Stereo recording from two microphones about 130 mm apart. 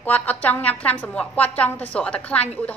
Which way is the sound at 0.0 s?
10° left (ahead or behind).